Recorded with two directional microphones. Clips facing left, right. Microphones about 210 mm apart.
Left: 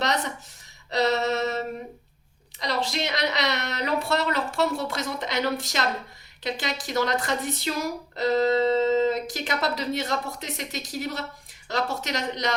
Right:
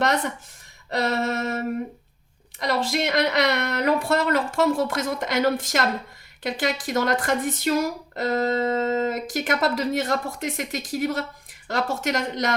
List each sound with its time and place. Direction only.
0.9 s speech: 50° right (ahead or behind)